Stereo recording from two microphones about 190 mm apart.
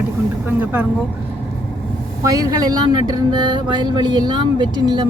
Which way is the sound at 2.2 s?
20° right (ahead or behind).